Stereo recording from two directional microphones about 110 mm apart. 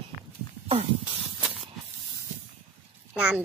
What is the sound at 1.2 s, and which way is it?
Spray, 10° right (ahead or behind).